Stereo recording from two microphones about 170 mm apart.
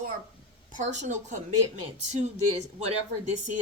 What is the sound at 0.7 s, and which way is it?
Speech, 45° right (ahead or behind).